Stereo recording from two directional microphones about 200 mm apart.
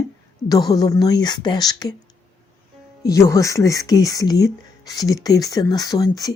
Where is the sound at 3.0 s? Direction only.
15° left (ahead or behind).